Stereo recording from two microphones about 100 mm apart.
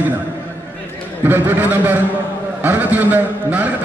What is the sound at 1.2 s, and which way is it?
A man's voice, 20° right (ahead or behind).